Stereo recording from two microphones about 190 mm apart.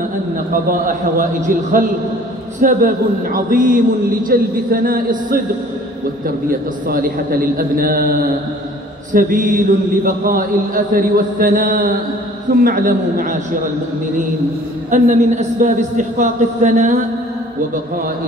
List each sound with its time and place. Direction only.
0.5 s mantra: 45° right (ahead or behind)
6.9 s mantra: 50° right (ahead or behind)
14.9 s a woman's voice: 40° right (ahead or behind)